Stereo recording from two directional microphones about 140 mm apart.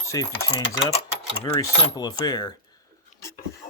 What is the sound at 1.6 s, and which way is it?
Speech, 30° left (ahead or behind).